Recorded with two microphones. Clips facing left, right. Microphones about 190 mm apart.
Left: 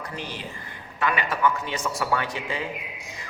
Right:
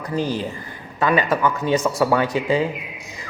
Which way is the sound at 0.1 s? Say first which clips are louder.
Right 12 dB; 40° right (ahead or behind).